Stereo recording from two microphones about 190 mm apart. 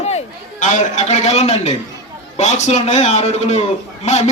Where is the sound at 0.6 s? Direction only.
40° left (ahead or behind).